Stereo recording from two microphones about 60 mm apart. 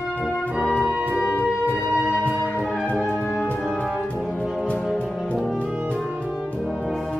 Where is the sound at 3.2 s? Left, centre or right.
Centre.